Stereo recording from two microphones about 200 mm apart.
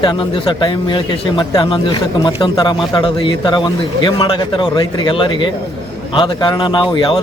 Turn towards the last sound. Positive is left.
turn(degrees=25)  # may be behind; listen again after turning